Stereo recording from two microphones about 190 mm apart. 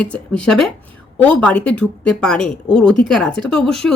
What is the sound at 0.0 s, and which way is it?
Speech, 5° left (ahead or behind).